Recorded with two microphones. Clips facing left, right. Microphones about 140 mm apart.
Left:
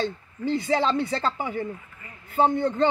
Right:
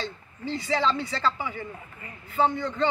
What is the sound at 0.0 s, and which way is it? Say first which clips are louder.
A man's voice: left 7 dB; 55° left (ahead or behind).